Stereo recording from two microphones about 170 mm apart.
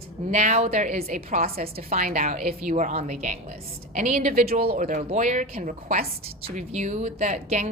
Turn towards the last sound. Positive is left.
turn(degrees=-45)  # may be behind; listen again after turning